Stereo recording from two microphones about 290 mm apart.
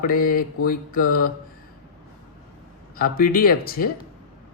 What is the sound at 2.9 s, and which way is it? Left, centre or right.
Speech, left.